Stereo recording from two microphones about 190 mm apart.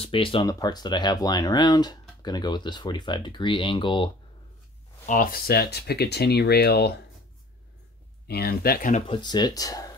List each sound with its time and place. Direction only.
0.0 s speech: 25° left (ahead or behind)
5.0 s speech: 45° left (ahead or behind)
8.3 s speech: 55° left (ahead or behind)
9.0 s speech: 25° left (ahead or behind)